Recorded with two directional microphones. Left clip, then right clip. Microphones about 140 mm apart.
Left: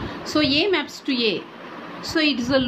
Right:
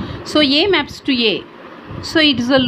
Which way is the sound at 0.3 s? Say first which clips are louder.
Right 6 dB; 60° right (ahead or behind).